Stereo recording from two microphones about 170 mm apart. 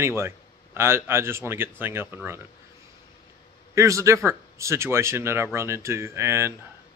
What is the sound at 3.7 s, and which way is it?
Speech, 20° right (ahead or behind).